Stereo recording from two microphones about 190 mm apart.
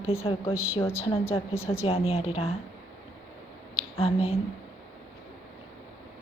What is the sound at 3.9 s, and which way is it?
Speech, 30° left (ahead or behind).